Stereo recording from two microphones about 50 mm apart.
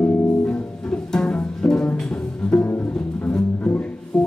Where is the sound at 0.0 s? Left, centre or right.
Centre.